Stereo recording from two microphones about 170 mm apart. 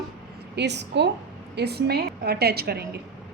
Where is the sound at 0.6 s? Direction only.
85° right.